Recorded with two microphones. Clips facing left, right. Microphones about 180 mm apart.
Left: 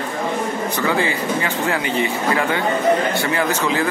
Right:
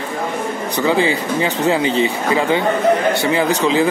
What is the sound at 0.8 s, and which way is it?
Speech, 20° right (ahead or behind).